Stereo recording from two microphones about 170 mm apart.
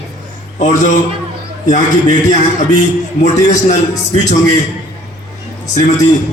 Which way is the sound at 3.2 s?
45° left (ahead or behind).